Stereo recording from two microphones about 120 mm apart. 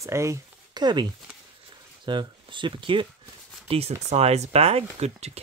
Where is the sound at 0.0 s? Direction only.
25° right (ahead or behind).